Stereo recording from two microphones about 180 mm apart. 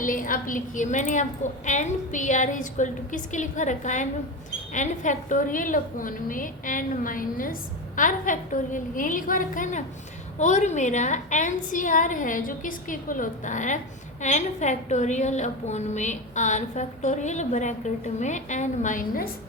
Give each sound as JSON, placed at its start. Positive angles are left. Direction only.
{"t": 0.0, "sound": "a woman's voice", "side_deg": 50}